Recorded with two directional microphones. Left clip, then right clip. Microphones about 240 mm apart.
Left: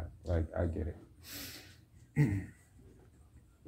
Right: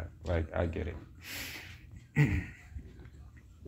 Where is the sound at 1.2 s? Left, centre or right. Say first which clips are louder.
Right 9 dB; left.